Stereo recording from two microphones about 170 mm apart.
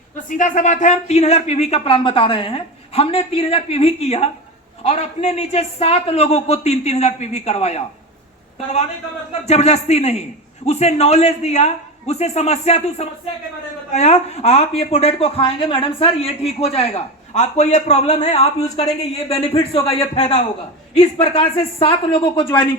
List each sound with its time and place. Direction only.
0.3 s speech: 50° left (ahead or behind)
9.5 s speech: 40° left (ahead or behind)